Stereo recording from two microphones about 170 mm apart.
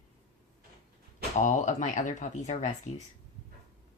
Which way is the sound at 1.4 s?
50° left (ahead or behind).